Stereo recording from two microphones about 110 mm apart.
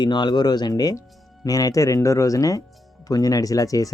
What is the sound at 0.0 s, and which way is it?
Speech, 40° left (ahead or behind).